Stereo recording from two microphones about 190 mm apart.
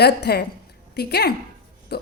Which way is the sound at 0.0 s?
60° left (ahead or behind).